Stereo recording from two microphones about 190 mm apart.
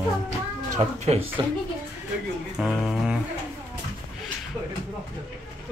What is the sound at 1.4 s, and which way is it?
Speech, 20° right (ahead or behind).